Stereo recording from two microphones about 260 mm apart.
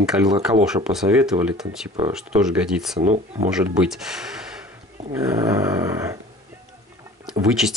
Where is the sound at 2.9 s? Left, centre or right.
Right.